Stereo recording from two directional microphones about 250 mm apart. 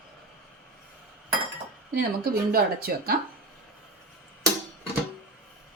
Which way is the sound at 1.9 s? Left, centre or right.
Right.